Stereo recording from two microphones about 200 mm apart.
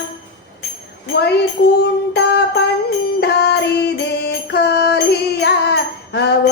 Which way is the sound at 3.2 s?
55° left (ahead or behind).